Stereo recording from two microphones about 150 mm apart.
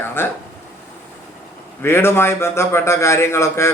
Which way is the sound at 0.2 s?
15° left (ahead or behind).